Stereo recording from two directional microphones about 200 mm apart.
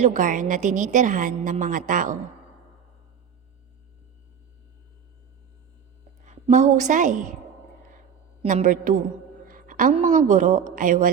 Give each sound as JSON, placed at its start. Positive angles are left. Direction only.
{"t": 0.0, "sound": "a woman's voice", "side_deg": -40}
{"t": 6.2, "sound": "a woman's voice", "side_deg": -35}
{"t": 8.4, "sound": "a woman's voice", "side_deg": -35}